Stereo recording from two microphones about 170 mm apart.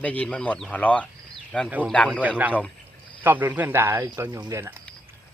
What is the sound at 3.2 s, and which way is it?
Speech, 10° right (ahead or behind).